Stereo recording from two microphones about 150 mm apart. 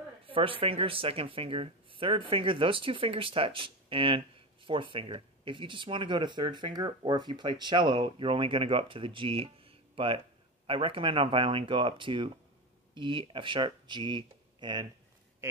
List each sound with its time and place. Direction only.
0.3 s speech: 35° right (ahead or behind)